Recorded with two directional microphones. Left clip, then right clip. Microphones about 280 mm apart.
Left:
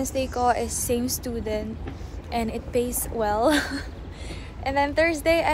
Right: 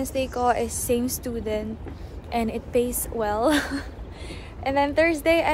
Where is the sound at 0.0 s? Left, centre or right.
Centre.